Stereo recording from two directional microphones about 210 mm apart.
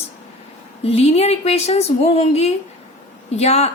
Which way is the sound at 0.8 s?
30° left (ahead or behind).